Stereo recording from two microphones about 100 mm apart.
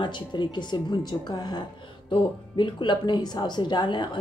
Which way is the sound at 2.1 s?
55° left (ahead or behind).